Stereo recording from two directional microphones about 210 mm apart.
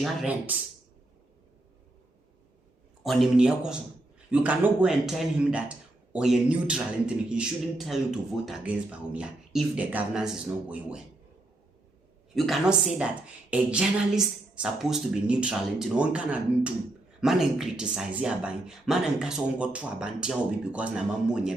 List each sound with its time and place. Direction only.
0.0 s a man's voice: 5° right (ahead or behind)
3.0 s a man's voice: centre (ahead or behind)
12.3 s a man's voice: centre (ahead or behind)